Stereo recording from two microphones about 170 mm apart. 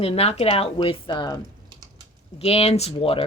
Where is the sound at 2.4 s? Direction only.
35° left (ahead or behind).